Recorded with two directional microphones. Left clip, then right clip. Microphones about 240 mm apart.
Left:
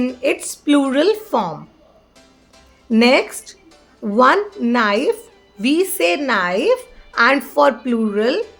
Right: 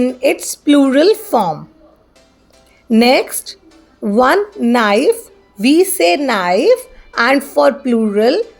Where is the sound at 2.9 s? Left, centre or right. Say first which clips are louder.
Right 3 dB; right.